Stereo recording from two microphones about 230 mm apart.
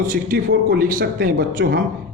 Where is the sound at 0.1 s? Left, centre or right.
Right.